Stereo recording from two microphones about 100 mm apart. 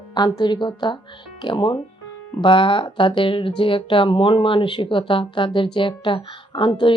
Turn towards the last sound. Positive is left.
turn(degrees=55)  # may be behind; listen again after turning